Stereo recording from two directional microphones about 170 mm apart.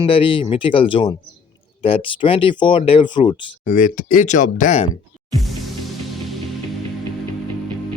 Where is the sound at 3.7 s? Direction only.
50° left (ahead or behind).